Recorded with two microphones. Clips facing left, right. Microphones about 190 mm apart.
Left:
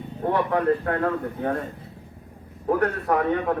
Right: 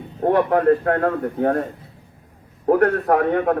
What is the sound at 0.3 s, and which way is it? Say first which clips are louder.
A man's voice: right 5 dB; 60° right (ahead or behind).